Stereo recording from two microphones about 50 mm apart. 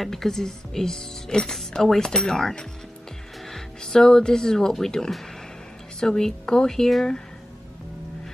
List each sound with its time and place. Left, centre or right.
0.0 s speech: centre